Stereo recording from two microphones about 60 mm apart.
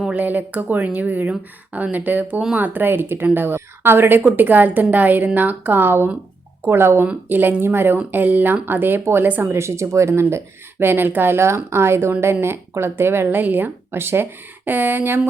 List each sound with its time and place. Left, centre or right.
0.1 s speech: right
7.1 s speech: right
9.5 s speech: right